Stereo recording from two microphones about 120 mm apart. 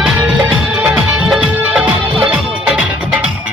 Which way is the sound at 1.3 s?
10° right (ahead or behind).